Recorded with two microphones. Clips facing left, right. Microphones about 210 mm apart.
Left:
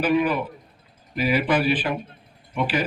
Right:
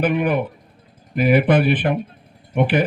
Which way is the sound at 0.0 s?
55° right (ahead or behind).